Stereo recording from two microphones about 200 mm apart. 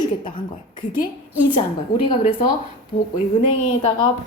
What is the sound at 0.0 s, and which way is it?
Speech, 25° left (ahead or behind).